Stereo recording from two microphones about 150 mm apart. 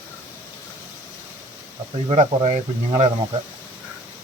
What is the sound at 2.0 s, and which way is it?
Speech, 50° right (ahead or behind).